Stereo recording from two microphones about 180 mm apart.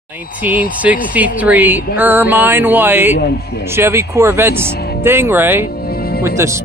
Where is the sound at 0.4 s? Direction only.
10° right (ahead or behind).